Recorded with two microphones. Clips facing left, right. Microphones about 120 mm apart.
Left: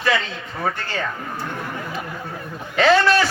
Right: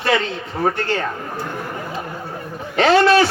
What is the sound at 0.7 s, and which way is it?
Speech, 55° right (ahead or behind).